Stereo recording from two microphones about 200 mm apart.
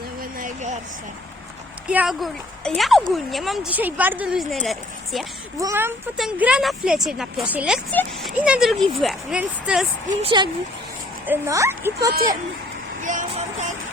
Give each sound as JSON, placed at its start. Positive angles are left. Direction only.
{"t": 0.2, "sound": "vehicle", "side_deg": -40}
{"t": 1.9, "sound": "a woman's voice", "side_deg": -5}
{"t": 5.5, "sound": "speech", "side_deg": -15}
{"t": 10.2, "sound": "speech", "side_deg": -25}
{"t": 11.3, "sound": "speech", "side_deg": -15}
{"t": 13.0, "sound": "music", "side_deg": -40}